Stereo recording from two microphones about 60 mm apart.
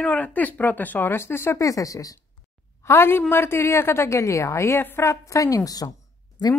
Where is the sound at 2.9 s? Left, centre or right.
Left.